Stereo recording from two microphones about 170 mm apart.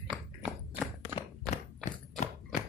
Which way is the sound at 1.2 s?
45° left (ahead or behind).